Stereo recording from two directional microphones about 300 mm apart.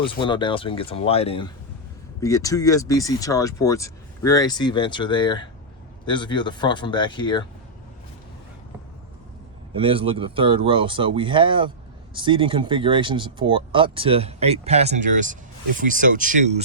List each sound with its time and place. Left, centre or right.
0.1 s speech: centre
9.7 s speech: centre